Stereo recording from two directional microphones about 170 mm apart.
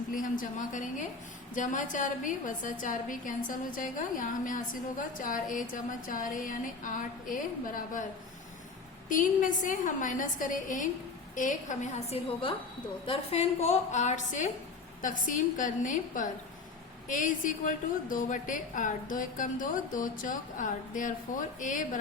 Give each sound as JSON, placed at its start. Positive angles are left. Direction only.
{"t": 0.1, "sound": "a woman's voice", "side_deg": 50}
{"t": 9.0, "sound": "a woman's voice", "side_deg": 50}